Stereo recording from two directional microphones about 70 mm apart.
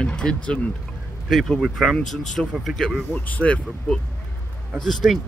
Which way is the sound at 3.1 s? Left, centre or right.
Left.